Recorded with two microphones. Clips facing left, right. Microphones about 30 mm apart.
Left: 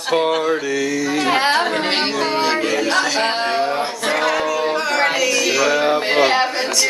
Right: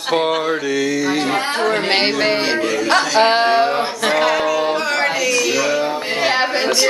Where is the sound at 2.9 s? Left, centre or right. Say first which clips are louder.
Right 8 dB; centre.